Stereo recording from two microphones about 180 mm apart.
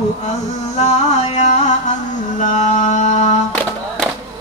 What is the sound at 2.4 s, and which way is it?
Mantra, 40° left (ahead or behind).